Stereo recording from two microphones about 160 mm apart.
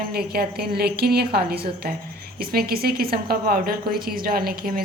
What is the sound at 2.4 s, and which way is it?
A woman's voice, 70° right (ahead or behind).